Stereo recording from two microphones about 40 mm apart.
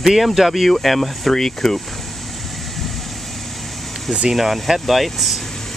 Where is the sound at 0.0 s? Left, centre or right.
Centre.